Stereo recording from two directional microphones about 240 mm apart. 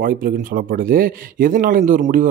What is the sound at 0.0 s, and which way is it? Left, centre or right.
Speech, right.